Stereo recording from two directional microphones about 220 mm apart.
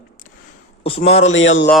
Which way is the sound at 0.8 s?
25° left (ahead or behind).